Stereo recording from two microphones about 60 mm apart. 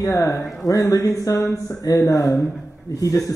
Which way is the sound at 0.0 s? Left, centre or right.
Left.